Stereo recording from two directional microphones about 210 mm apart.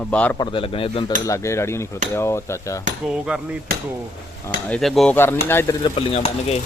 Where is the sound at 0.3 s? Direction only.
25° left (ahead or behind).